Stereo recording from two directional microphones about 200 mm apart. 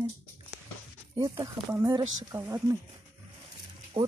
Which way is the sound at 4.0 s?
20° right (ahead or behind).